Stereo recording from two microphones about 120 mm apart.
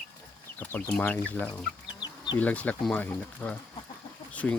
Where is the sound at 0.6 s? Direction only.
15° left (ahead or behind).